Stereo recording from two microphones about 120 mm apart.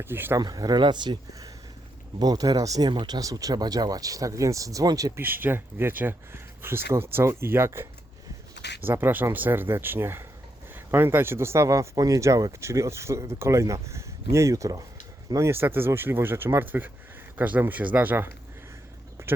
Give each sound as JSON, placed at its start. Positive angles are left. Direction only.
{"t": 0.0, "sound": "speech", "side_deg": -20}
{"t": 0.3, "sound": "speech", "side_deg": -30}
{"t": 5.2, "sound": "speech", "side_deg": -15}